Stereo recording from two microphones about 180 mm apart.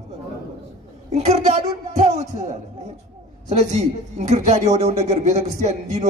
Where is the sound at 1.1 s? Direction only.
35° right (ahead or behind).